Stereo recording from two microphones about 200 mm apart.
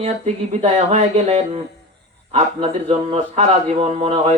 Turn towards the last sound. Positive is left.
turn(degrees=-35)  # may be behind; listen again after turning